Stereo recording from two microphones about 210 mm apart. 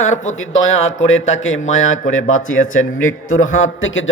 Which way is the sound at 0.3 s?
70° left (ahead or behind).